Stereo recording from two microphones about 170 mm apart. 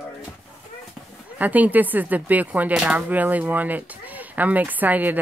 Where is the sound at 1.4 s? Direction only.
10° right (ahead or behind).